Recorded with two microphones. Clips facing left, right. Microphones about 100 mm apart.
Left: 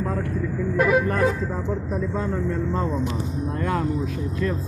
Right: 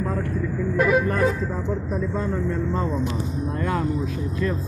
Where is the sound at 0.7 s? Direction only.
75° left (ahead or behind).